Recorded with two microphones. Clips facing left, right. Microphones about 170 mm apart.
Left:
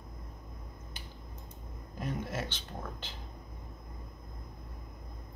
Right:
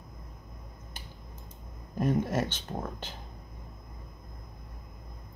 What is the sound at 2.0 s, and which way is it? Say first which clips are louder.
Speech: right 9 dB; 45° right (ahead or behind).